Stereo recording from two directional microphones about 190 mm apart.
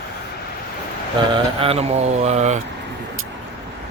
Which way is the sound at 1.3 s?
30° right (ahead or behind).